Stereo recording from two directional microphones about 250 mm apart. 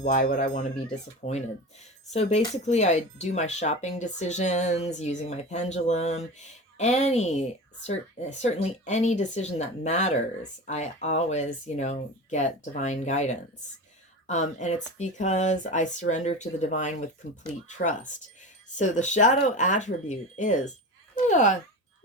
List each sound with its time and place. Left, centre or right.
0.0 s speech: left